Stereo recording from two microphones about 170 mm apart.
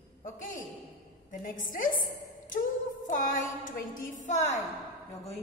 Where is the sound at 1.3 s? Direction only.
50° left (ahead or behind).